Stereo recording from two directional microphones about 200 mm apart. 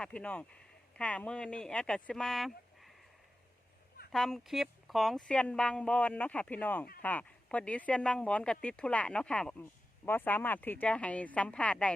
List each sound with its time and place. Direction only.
0.0 s speech: 5° left (ahead or behind)
4.1 s speech: centre (ahead or behind)